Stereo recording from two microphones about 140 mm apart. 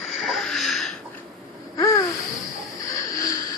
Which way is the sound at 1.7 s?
25° left (ahead or behind).